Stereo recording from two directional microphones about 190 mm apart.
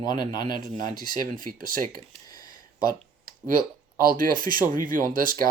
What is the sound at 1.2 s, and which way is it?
Speech, 45° right (ahead or behind).